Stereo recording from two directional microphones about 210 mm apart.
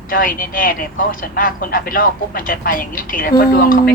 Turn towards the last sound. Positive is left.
turn(degrees=40)  # may be behind; listen again after turning